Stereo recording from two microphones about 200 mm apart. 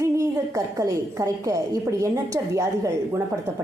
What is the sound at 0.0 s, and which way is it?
A woman's voice, 15° right (ahead or behind).